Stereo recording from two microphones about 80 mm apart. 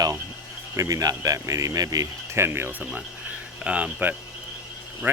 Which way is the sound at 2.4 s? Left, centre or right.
Right.